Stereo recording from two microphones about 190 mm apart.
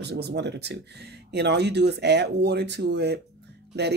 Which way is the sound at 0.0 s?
60° right (ahead or behind).